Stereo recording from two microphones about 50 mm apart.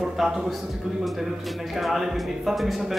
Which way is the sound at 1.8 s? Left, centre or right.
Centre.